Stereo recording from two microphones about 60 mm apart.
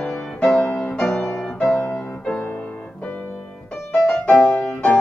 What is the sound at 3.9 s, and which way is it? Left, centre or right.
Music, centre.